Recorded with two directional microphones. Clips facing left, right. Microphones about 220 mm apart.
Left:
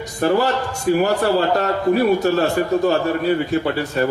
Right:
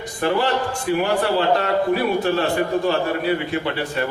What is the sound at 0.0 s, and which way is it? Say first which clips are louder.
A man's voice: left 3 dB; 40° left (ahead or behind).